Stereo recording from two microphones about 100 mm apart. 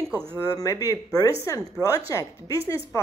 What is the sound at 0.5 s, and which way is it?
A woman's voice, 35° left (ahead or behind).